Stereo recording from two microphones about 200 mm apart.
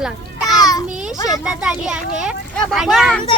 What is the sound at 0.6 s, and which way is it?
Speech, 20° left (ahead or behind).